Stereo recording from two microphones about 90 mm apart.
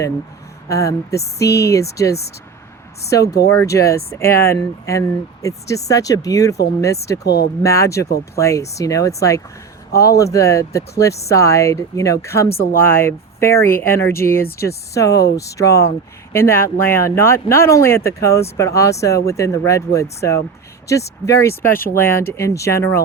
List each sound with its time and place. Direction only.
0.7 s speech: 35° left (ahead or behind)